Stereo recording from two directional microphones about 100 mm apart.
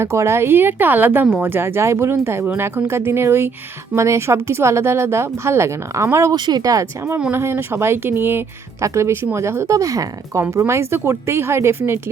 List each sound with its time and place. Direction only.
0.0 s speech: 25° right (ahead or behind)
6.3 s speech: 45° right (ahead or behind); by 11.8 s 25° right (ahead or behind)